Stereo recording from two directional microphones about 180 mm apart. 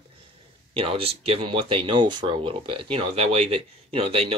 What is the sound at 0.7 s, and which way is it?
Speech, 30° right (ahead or behind).